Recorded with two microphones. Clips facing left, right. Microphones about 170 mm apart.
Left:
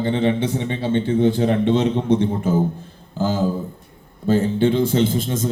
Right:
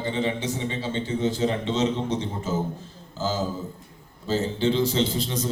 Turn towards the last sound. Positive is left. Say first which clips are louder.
# left 5 dB
turn(degrees=50)  # may be behind; listen again after turning